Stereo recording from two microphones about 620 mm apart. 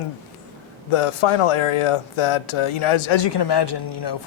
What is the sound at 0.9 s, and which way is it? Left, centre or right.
Speech, left.